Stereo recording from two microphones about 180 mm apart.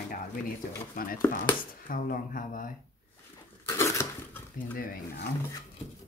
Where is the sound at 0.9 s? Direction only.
50° left (ahead or behind).